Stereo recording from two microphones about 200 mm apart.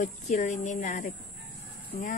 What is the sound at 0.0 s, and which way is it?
Speech, 40° left (ahead or behind).